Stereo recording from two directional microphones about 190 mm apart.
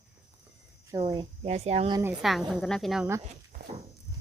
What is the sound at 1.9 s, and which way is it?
A woman's voice, 10° right (ahead or behind).